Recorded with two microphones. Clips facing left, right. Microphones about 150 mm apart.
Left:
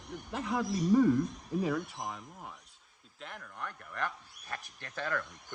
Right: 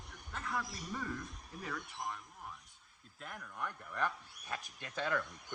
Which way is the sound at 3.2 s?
5° right (ahead or behind).